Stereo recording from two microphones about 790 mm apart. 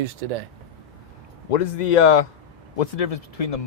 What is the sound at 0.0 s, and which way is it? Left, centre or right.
Speech, right.